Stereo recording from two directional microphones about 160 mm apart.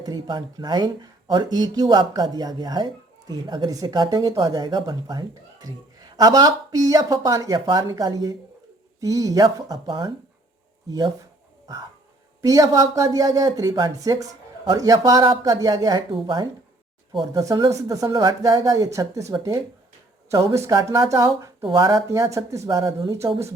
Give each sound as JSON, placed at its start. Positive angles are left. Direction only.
{"t": 0.0, "sound": "speech", "side_deg": -25}
{"t": 12.4, "sound": "speech", "side_deg": -20}